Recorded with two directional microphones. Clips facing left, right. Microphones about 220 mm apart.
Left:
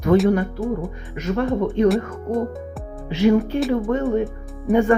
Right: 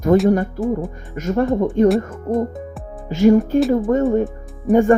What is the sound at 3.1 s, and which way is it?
Speech, 45° right (ahead or behind).